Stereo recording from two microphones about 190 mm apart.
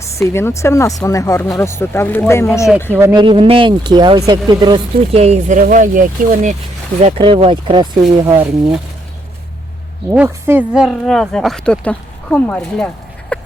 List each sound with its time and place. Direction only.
0.0 s speech: 15° left (ahead or behind)
2.9 s speech: 15° right (ahead or behind); by 6.6 s 40° right (ahead or behind)
7.0 s speech: 30° right (ahead or behind)
8.2 s speech: 15° right (ahead or behind)
10.1 s speech: 10° right (ahead or behind); by 12.9 s 5° left (ahead or behind)
13.3 s chicken: 5° left (ahead or behind)